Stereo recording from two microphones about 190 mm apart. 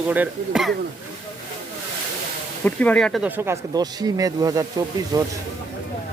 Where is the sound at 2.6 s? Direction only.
5° left (ahead or behind).